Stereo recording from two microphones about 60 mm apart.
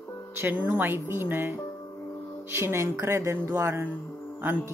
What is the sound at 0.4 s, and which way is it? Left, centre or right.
A woman's voice, right.